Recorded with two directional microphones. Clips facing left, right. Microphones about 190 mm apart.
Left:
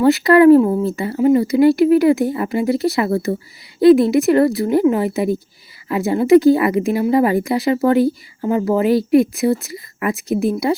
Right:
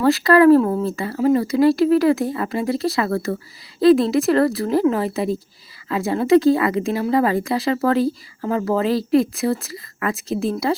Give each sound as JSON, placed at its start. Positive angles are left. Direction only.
{"t": 0.0, "sound": "speech", "side_deg": 20}